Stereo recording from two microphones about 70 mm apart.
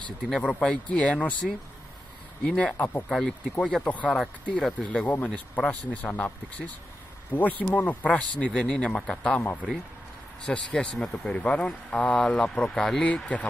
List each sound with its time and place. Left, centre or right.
0.4 s speech: centre
1.4 s speech: centre
2.4 s speech: centre
3.1 s speech: centre
3.4 s speech: centre
9.4 s speech: left
10.4 s speech: centre